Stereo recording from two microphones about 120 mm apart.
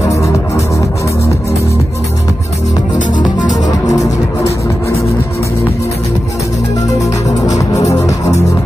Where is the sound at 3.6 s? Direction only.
30° left (ahead or behind).